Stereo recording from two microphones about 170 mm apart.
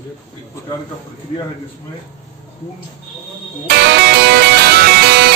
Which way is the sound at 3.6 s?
75° right (ahead or behind).